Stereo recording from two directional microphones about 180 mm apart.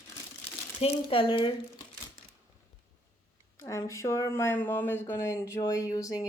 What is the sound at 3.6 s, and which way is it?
Speech, 15° left (ahead or behind).